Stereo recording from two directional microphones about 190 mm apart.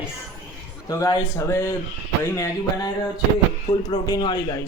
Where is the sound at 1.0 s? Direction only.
15° left (ahead or behind).